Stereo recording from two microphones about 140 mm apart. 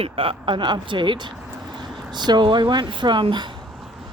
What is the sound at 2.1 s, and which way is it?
Speech, 30° right (ahead or behind).